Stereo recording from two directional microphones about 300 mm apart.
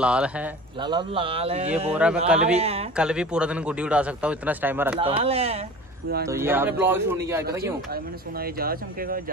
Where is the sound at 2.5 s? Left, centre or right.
Centre.